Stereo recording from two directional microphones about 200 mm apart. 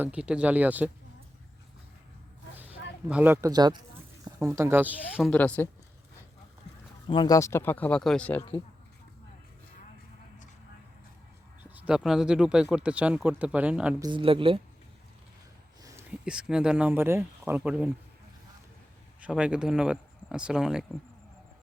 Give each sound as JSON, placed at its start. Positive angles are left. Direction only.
{"t": 0.0, "sound": "speech", "side_deg": -5}
{"t": 3.1, "sound": "speech", "side_deg": -5}
{"t": 5.3, "sound": "speech", "side_deg": 5}
{"t": 7.1, "sound": "speech", "side_deg": 20}
{"t": 11.6, "sound": "speech", "side_deg": -5}
{"t": 14.0, "sound": "speech", "side_deg": -25}
{"t": 15.8, "sound": "a sound", "side_deg": -15}
{"t": 16.2, "sound": "speech", "side_deg": -5}
{"t": 19.2, "sound": "speech", "side_deg": -5}